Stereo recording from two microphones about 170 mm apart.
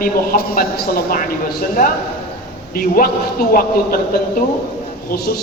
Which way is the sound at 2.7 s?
55° left (ahead or behind).